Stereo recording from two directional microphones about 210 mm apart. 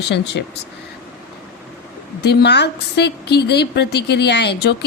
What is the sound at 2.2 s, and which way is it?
A woman's voice, 50° left (ahead or behind).